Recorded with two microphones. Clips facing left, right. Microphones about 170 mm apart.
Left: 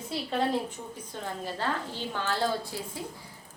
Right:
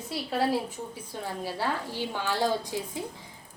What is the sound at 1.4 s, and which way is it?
A woman's voice, 10° right (ahead or behind).